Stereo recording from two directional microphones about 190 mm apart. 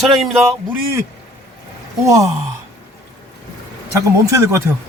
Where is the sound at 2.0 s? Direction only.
15° right (ahead or behind).